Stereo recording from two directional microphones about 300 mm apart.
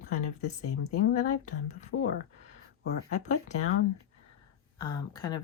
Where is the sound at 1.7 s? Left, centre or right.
Left.